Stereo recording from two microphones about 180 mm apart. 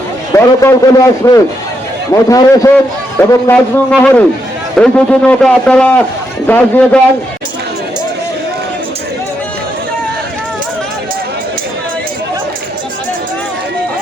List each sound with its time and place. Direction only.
0.3 s a man's voice: 15° left (ahead or behind)